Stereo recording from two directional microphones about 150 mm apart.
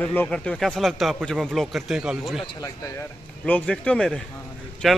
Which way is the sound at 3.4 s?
10° left (ahead or behind).